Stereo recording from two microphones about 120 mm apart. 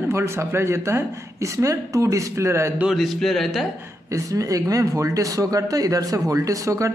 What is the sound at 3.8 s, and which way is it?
Speech, 25° right (ahead or behind).